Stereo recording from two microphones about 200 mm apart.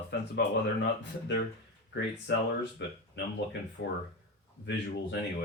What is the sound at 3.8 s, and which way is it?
Speech, 70° left (ahead or behind).